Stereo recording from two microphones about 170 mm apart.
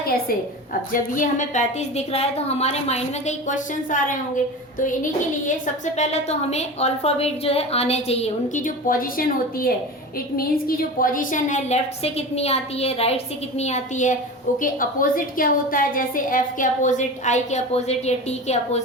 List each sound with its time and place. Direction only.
0.7 s a woman's voice: 50° left (ahead or behind)
5.5 s a woman's voice: 45° left (ahead or behind)